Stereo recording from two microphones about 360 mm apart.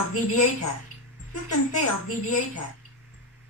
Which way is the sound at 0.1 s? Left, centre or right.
Left.